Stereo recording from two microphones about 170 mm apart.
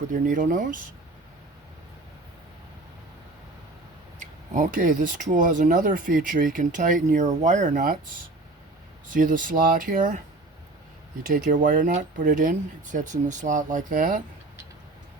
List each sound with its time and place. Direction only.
0.1 s speech: 50° right (ahead or behind)
4.2 s speech: 50° right (ahead or behind)
9.0 s speech: 50° right (ahead or behind)
11.3 s speech: 50° right (ahead or behind)